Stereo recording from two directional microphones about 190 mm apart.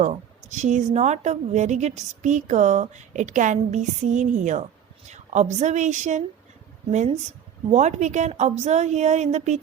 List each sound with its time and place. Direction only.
0.0 s a woman's voice: 40° right (ahead or behind)
7.7 s a woman's voice: 35° right (ahead or behind)